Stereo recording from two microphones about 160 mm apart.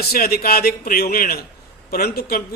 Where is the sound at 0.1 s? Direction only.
70° left (ahead or behind).